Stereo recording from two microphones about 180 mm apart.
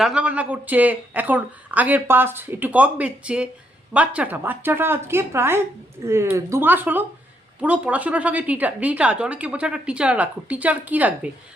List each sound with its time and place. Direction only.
0.0 s a woman's voice: 5° right (ahead or behind)